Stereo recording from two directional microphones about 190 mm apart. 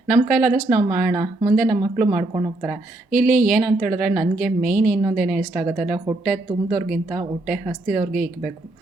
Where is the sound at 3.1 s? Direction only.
45° right (ahead or behind).